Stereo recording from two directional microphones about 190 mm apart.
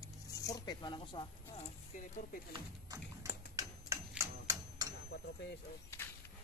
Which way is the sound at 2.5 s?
20° right (ahead or behind).